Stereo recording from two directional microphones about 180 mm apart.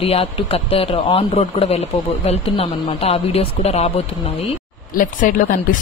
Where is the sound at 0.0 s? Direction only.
30° left (ahead or behind).